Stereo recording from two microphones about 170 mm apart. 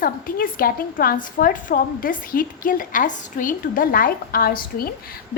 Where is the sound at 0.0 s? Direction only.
55° left (ahead or behind).